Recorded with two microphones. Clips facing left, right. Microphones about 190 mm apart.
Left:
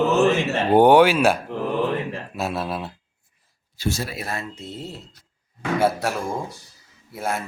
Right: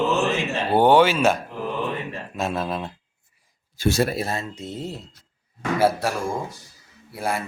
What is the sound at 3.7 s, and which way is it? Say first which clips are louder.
Speech: right 6 dB; 65° right (ahead or behind).